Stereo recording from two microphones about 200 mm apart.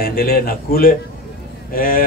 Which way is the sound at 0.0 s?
45° left (ahead or behind).